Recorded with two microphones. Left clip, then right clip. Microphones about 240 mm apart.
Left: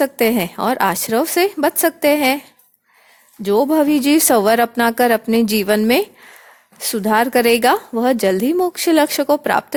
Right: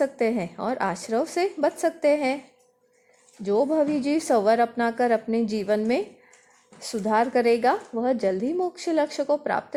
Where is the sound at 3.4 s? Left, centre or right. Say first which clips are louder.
Left 7 dB; left.